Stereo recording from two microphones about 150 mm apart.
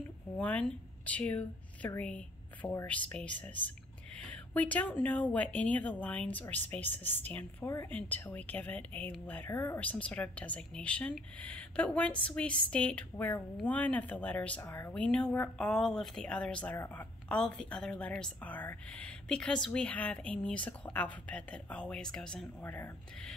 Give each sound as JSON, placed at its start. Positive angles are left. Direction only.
{"t": 0.4, "sound": "speech", "side_deg": 10}
{"t": 16.7, "sound": "speech", "side_deg": 15}
{"t": 17.3, "sound": "speech", "side_deg": 5}